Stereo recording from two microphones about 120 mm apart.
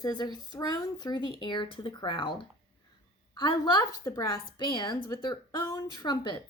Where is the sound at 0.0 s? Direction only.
35° left (ahead or behind).